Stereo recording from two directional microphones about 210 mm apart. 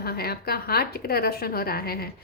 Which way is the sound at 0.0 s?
45° left (ahead or behind).